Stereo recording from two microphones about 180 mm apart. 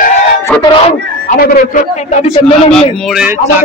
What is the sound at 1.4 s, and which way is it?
A man's voice, 50° left (ahead or behind).